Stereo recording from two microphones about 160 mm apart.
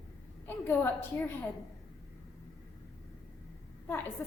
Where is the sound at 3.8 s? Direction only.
10° left (ahead or behind).